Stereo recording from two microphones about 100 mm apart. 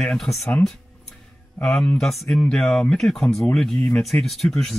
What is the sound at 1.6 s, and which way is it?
Speech, 5° left (ahead or behind).